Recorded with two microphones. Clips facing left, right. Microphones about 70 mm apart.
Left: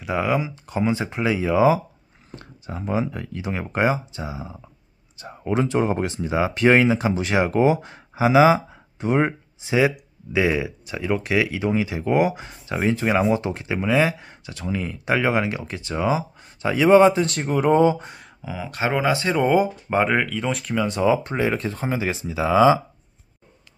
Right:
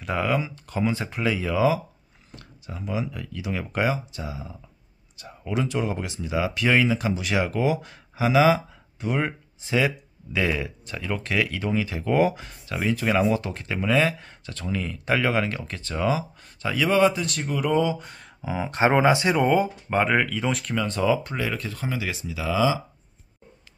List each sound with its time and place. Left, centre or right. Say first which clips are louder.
0.0 s speech: left 2 dB; centre
2.3 s speech: left 5 dB; left
9.6 s speech: left 4 dB; centre; by 18.0 s left
18.4 s speech: right 4 dB; centre
19.3 s speech: left 2 dB; centre
20.7 s speech: left 4 dB; centre; by 22.8 s left